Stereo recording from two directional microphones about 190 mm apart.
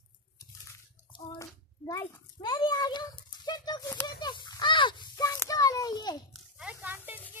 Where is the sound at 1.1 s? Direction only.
20° left (ahead or behind).